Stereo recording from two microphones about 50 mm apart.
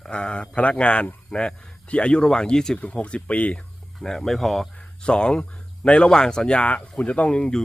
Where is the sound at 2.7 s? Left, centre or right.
Left.